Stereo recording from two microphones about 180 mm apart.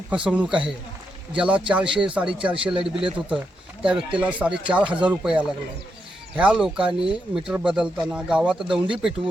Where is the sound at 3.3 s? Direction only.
5° right (ahead or behind).